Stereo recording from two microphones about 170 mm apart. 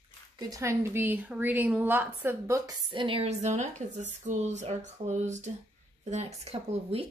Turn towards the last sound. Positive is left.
turn(degrees=-35)  # may be behind; listen again after turning